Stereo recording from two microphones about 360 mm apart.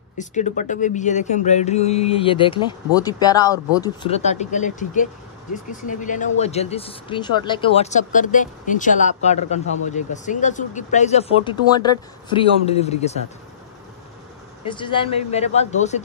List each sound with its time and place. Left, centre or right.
0.2 s speech: centre
14.7 s speech: centre